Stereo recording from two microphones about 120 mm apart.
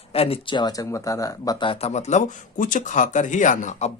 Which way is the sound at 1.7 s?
60° left (ahead or behind).